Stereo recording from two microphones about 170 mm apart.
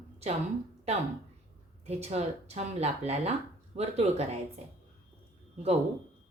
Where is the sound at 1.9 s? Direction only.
40° right (ahead or behind).